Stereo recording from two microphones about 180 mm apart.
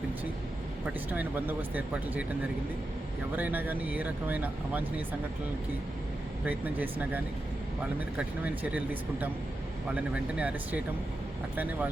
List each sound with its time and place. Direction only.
1.1 s speech: 10° right (ahead or behind)
3.3 s speech: 10° right (ahead or behind)
6.4 s speech: 10° right (ahead or behind)
8.4 s speech: 10° right (ahead or behind)